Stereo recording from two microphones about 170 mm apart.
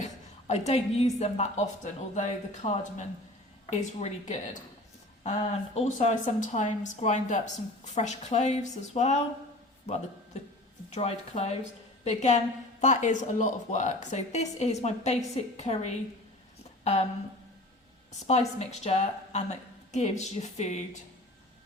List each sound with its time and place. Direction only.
0.0 s a woman's voice: 40° left (ahead or behind)
10.9 s a woman's voice: 35° left (ahead or behind)
18.3 s a woman's voice: 40° left (ahead or behind)